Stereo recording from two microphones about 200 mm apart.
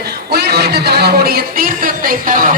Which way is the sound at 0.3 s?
55° right (ahead or behind).